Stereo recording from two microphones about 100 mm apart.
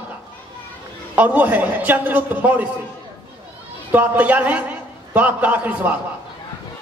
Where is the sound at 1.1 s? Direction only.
15° right (ahead or behind).